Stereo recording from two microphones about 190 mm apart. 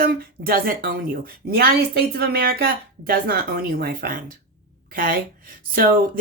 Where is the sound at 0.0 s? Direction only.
50° right (ahead or behind).